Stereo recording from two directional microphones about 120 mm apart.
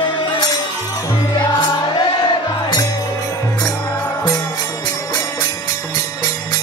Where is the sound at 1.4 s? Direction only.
40° left (ahead or behind).